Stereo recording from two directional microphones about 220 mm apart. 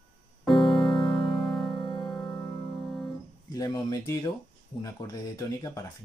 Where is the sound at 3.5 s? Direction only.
15° left (ahead or behind).